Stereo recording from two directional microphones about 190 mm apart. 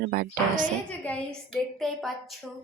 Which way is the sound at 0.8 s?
5° left (ahead or behind).